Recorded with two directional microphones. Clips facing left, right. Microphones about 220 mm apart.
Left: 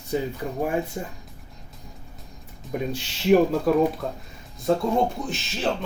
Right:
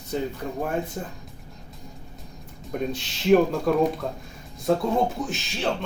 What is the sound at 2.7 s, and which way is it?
Speech, 10° left (ahead or behind).